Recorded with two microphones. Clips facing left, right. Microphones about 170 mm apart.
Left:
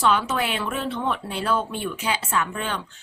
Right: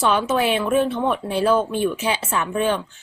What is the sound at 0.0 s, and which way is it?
Speech, 20° right (ahead or behind).